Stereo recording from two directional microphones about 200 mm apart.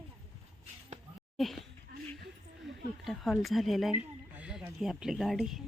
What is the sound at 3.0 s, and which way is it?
Speech, centre (ahead or behind).